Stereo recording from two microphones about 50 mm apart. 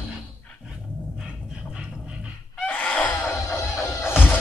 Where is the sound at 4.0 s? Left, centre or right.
Left.